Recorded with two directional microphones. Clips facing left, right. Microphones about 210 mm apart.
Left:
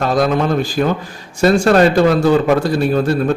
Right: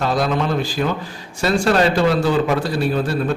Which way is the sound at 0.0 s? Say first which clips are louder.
Left 4 dB; 50° left (ahead or behind).